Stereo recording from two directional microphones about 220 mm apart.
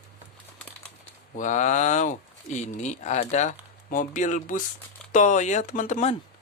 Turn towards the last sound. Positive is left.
turn(degrees=30)  # may be behind; listen again after turning